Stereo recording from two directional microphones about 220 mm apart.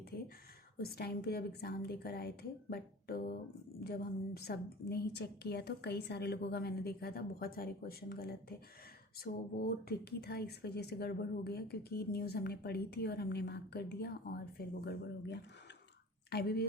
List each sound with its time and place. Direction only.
0.8 s speech: 45° left (ahead or behind)